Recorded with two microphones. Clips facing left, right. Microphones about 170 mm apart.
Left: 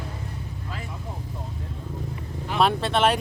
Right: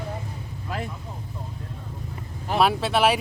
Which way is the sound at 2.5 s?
5° right (ahead or behind).